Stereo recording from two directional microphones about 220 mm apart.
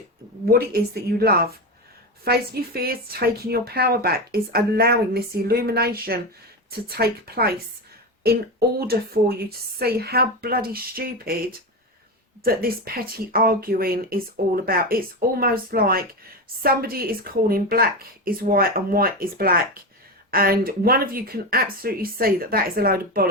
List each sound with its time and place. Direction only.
0.4 s speech: 45° right (ahead or behind)
12.4 s speech: 40° right (ahead or behind)